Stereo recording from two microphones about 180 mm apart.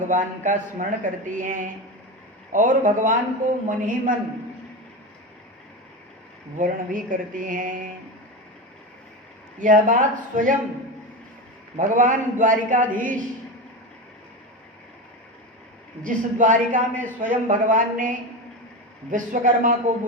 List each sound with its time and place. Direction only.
0.0 s a man's voice: 45° right (ahead or behind)
6.6 s a man's voice: 45° right (ahead or behind)
9.6 s a man's voice: 45° right (ahead or behind)
11.8 s a man's voice: 45° right (ahead or behind)
16.0 s a man's voice: 45° right (ahead or behind)